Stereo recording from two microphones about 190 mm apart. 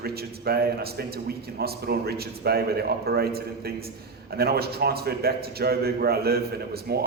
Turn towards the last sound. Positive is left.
turn(degrees=-55)  # may be behind; listen again after turning